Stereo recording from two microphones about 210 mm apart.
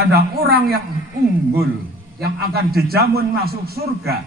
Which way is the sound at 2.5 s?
45° right (ahead or behind).